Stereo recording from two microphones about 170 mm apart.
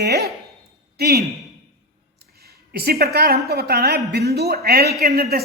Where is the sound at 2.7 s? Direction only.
65° right (ahead or behind).